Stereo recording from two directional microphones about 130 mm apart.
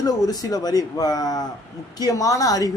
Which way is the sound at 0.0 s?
30° left (ahead or behind).